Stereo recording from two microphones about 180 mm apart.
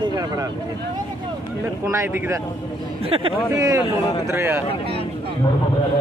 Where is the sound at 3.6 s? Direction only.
20° right (ahead or behind).